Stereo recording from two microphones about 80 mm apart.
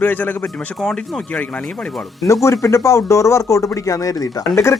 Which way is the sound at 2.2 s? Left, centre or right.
Left.